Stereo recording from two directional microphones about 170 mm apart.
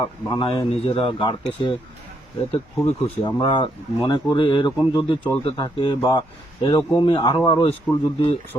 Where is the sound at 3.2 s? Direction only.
25° left (ahead or behind).